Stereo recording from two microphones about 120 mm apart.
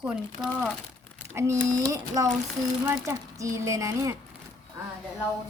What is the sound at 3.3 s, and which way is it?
Speech, 25° right (ahead or behind).